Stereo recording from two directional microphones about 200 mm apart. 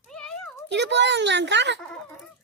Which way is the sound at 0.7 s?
60° right (ahead or behind).